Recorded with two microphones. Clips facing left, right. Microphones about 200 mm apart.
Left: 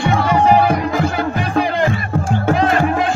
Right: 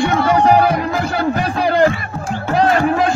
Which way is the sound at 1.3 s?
40° right (ahead or behind).